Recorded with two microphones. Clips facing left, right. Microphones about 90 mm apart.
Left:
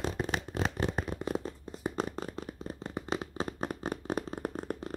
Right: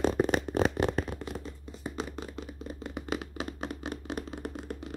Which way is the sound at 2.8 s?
35° left (ahead or behind).